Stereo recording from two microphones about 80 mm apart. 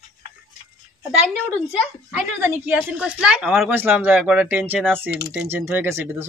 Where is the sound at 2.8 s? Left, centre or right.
Centre.